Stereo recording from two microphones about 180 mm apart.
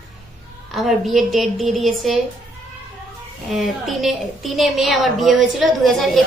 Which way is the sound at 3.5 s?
Centre (ahead or behind).